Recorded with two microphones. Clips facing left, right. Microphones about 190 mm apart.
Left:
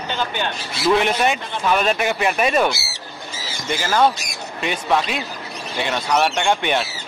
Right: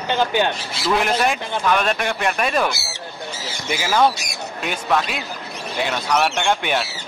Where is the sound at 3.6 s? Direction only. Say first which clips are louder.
Even; 5° right (ahead or behind).